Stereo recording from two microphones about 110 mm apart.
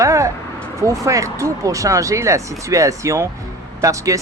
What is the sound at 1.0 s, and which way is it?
Speech, 30° right (ahead or behind).